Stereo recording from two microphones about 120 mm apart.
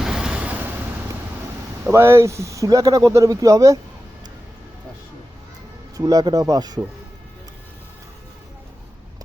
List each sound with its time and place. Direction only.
0.0 s waves: 5° right (ahead or behind)
1.8 s speech: 20° right (ahead or behind)
6.0 s speech: 30° right (ahead or behind)